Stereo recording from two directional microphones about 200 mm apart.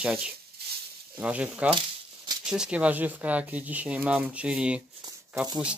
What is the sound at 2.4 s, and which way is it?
Speech, 5° right (ahead or behind).